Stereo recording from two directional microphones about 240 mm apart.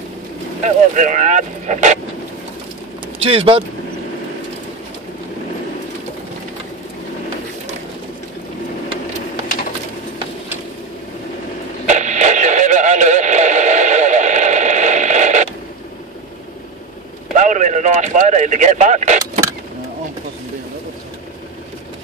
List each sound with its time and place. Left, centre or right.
0.7 s speech: right
3.2 s speech: right
11.8 s radio: right
17.4 s a sound: right